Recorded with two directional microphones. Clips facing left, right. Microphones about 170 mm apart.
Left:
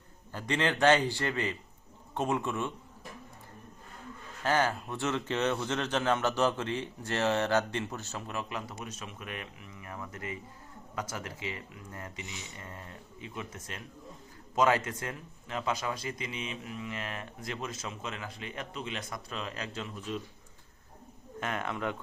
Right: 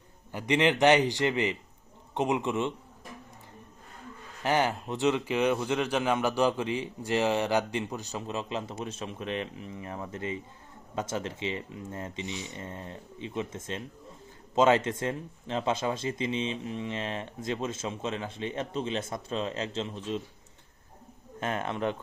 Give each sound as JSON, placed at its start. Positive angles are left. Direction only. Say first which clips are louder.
{"t": 0.3, "sound": "speech", "louder": "right 5 dB", "side_deg": -15}
{"t": 4.4, "sound": "speech", "louder": "right 2 dB", "side_deg": -15}
{"t": 21.4, "sound": "speech", "louder": "right 4 dB", "side_deg": -25}